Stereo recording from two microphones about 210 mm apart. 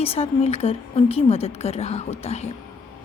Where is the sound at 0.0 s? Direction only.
25° left (ahead or behind).